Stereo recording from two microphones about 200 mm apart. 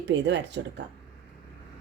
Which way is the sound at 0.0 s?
60° right (ahead or behind).